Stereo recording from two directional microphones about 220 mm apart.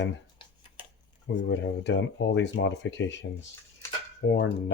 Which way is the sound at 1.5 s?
55° left (ahead or behind).